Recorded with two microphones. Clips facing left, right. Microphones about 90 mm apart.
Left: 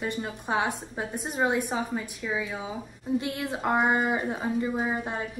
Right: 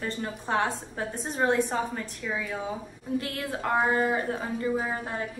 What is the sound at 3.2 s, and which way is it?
A woman's voice, 20° left (ahead or behind).